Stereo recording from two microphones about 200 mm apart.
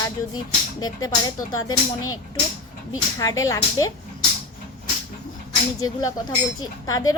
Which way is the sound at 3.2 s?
15° left (ahead or behind).